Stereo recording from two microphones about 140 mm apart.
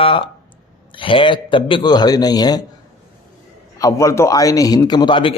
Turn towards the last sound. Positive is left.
turn(degrees=40)  # may be behind; listen again after turning